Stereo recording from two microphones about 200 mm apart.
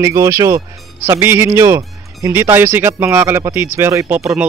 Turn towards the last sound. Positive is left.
turn(degrees=-5)  # may be behind; listen again after turning